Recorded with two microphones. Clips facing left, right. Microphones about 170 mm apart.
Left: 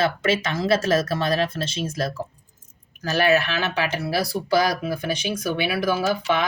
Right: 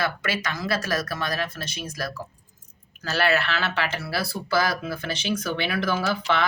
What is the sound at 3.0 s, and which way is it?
Speech, 15° left (ahead or behind).